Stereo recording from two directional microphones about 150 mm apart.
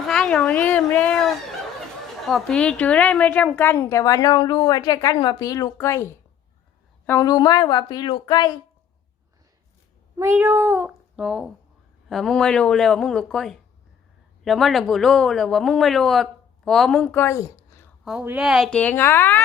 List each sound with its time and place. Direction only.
0.1 s a woman's voice: 5° left (ahead or behind); by 8.5 s 25° left (ahead or behind)
10.2 s speech: 15° right (ahead or behind); by 17.8 s 20° left (ahead or behind)
18.0 s speech: 5° right (ahead or behind); by 19.4 s 15° left (ahead or behind)